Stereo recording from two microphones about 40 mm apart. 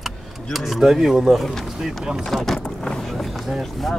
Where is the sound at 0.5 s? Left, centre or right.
Centre.